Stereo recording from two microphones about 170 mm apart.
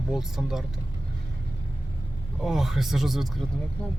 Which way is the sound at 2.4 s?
Centre (ahead or behind).